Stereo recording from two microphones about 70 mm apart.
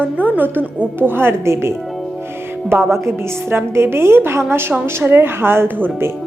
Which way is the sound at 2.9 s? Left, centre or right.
Right.